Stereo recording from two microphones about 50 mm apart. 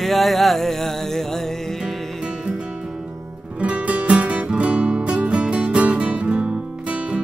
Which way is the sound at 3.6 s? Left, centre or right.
Right.